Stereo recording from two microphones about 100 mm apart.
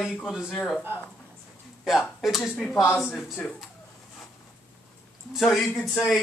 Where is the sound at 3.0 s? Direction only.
Centre (ahead or behind).